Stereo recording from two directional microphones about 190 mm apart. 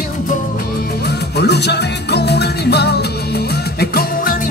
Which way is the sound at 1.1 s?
60° left (ahead or behind).